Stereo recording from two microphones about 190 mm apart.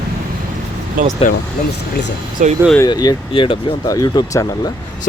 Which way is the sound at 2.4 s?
40° right (ahead or behind).